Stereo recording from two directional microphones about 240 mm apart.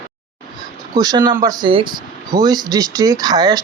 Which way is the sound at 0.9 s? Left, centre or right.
Centre.